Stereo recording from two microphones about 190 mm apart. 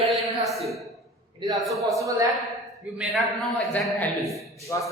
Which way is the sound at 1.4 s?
20° right (ahead or behind).